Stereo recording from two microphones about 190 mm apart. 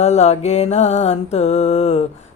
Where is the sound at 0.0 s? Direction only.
35° left (ahead or behind).